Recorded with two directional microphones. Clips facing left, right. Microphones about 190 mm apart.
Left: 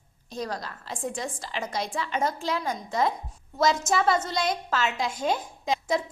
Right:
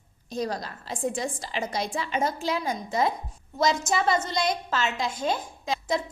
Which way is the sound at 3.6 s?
5° left (ahead or behind).